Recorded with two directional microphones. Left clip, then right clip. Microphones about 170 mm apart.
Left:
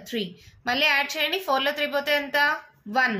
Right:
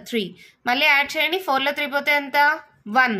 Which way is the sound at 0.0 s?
50° right (ahead or behind).